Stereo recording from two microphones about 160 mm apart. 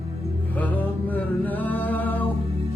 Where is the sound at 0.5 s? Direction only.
10° left (ahead or behind).